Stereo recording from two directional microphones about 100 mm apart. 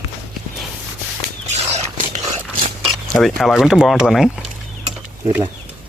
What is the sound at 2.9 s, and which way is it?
Speech, centre (ahead or behind).